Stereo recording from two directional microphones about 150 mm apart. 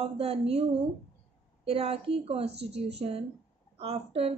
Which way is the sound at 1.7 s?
40° right (ahead or behind).